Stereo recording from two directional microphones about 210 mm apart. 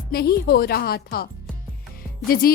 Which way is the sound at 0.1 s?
50° left (ahead or behind).